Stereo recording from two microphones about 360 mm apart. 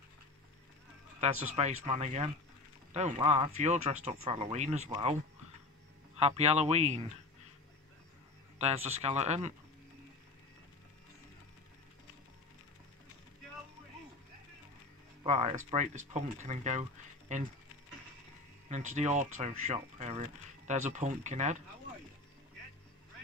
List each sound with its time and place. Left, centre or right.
1.2 s speech: centre
6.1 s speech: centre
8.5 s speech: centre
15.2 s speech: centre
18.7 s speech: centre